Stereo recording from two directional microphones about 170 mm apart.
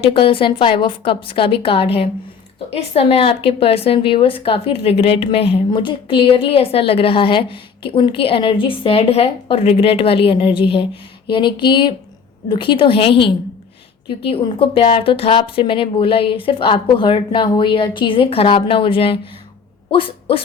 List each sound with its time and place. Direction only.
0.0 s a woman's voice: 30° left (ahead or behind)